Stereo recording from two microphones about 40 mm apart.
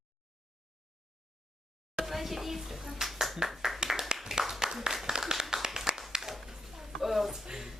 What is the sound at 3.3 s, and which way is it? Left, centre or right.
Clapping, centre.